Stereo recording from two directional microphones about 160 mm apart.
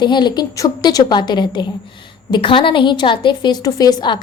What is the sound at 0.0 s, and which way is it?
A woman's voice, 25° left (ahead or behind).